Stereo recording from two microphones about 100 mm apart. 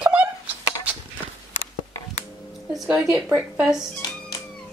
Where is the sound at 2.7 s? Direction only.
Centre (ahead or behind).